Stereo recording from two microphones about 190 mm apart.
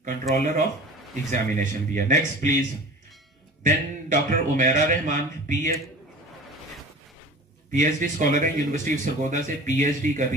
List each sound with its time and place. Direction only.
0.4 s speech: 40° right (ahead or behind)
3.6 s speech: 40° right (ahead or behind)
7.7 s speech: 45° right (ahead or behind)